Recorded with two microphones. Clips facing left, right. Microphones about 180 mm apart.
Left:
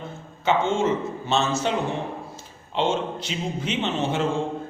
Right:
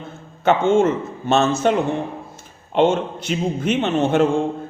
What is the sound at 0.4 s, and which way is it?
A man's voice, 55° right (ahead or behind).